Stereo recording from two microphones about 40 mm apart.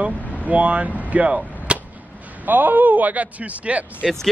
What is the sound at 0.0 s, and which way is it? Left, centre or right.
Speech, right.